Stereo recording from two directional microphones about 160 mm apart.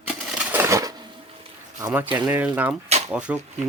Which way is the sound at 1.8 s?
10° right (ahead or behind).